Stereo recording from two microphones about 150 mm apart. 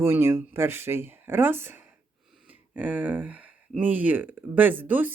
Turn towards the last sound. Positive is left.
turn(degrees=-10)  # may be behind; listen again after turning